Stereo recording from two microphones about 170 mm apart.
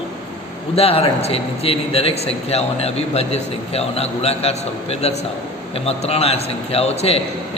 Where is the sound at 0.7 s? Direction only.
35° left (ahead or behind).